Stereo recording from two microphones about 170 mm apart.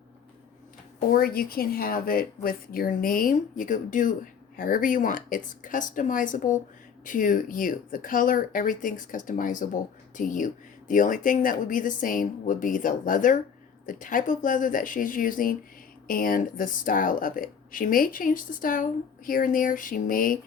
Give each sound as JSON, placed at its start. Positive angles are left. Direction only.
{"t": 1.1, "sound": "speech", "side_deg": 60}